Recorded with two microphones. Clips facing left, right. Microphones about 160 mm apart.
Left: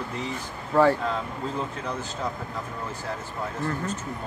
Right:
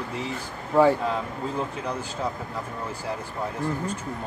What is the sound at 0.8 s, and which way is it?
Speech, 15° right (ahead or behind).